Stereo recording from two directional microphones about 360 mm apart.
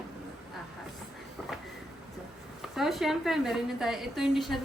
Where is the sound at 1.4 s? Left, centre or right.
Centre.